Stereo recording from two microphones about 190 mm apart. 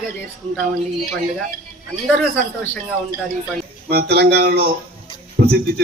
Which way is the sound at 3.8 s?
55° right (ahead or behind).